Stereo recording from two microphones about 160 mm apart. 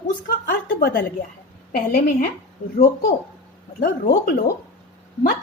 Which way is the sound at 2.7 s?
60° left (ahead or behind).